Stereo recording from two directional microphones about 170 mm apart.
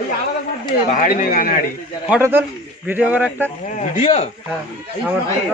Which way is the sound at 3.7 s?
45° left (ahead or behind).